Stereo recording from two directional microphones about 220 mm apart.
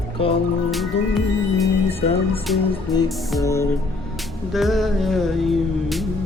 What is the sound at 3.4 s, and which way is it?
Music, 15° left (ahead or behind).